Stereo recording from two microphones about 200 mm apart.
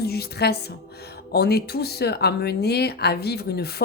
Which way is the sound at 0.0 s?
50° left (ahead or behind).